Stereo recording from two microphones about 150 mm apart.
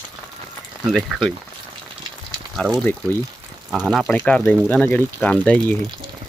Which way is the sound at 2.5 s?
Centre (ahead or behind).